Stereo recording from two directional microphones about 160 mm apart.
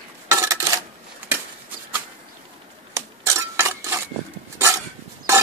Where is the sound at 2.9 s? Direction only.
20° right (ahead or behind).